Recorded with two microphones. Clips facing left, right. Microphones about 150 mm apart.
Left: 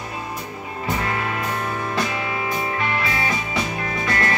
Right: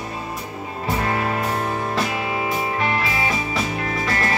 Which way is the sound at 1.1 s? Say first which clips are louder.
Right 3 dB; 30° right (ahead or behind).